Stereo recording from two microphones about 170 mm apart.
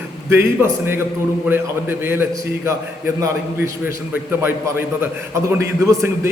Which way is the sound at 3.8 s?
15° right (ahead or behind).